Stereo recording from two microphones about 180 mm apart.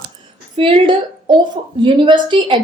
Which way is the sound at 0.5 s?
30° right (ahead or behind).